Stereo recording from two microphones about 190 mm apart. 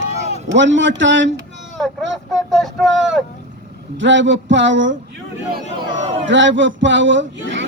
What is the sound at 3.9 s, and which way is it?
Speech, 75° right (ahead or behind).